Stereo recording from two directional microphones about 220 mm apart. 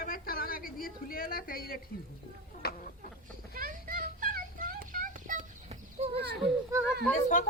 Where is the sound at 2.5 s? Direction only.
35° left (ahead or behind).